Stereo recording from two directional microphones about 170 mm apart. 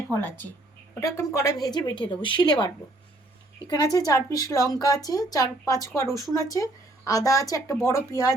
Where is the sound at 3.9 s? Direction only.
20° left (ahead or behind).